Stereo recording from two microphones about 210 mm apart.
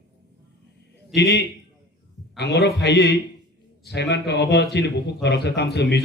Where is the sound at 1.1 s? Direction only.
55° left (ahead or behind).